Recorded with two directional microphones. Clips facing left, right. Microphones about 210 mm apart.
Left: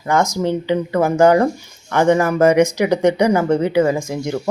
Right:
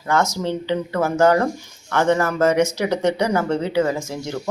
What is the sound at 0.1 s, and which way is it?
Speech, 15° left (ahead or behind).